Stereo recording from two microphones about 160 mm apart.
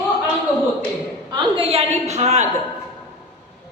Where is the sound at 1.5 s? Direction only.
35° right (ahead or behind).